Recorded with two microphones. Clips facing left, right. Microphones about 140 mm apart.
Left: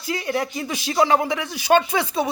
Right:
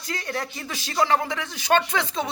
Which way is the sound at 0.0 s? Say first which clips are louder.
Left 6 dB; 10° left (ahead or behind).